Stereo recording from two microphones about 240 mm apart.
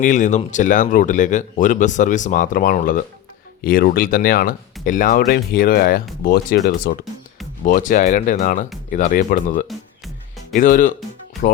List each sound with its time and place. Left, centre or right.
0.0 s speech: left